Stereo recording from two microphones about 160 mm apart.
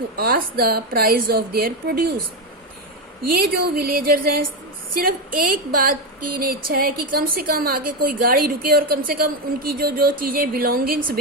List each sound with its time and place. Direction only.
0.2 s speech: 70° right (ahead or behind)
3.2 s a woman's voice: 65° right (ahead or behind)